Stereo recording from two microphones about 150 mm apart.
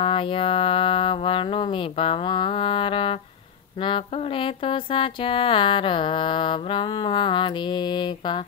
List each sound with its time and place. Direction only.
0.0 s music: 35° left (ahead or behind)